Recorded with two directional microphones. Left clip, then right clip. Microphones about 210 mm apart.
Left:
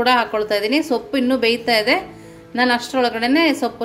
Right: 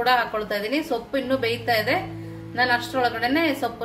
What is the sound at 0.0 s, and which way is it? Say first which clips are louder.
A woman's voice: left 5 dB; 40° left (ahead or behind).